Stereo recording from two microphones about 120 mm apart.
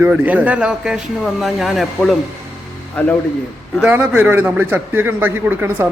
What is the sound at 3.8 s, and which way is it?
Speech, 15° right (ahead or behind).